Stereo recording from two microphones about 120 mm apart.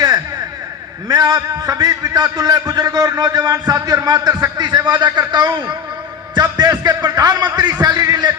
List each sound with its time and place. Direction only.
1.0 s a man's voice: 30° right (ahead or behind)